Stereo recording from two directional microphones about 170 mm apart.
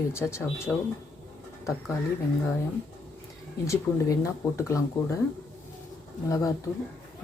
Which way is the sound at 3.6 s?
20° left (ahead or behind).